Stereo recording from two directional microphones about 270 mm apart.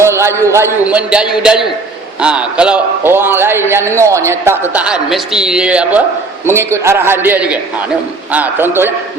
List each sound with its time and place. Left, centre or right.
0.0 s a man's voice: centre